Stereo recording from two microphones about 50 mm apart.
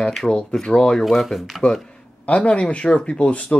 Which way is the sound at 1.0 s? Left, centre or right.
Centre.